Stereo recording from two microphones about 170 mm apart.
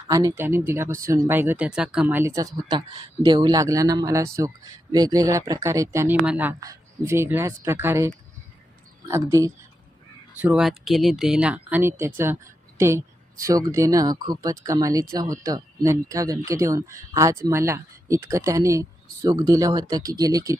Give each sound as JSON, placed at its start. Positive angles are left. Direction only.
{"t": 0.1, "sound": "speech", "side_deg": -20}
{"t": 10.4, "sound": "speech", "side_deg": -5}